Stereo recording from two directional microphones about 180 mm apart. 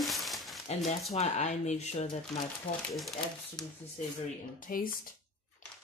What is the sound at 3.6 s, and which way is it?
Speech, 5° left (ahead or behind).